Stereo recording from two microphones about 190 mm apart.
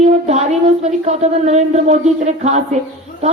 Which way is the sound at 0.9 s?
35° right (ahead or behind).